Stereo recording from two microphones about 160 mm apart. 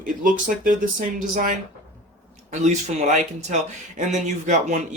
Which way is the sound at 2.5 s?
45° right (ahead or behind).